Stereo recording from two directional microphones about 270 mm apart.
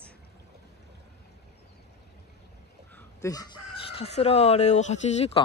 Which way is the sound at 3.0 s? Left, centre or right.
Centre.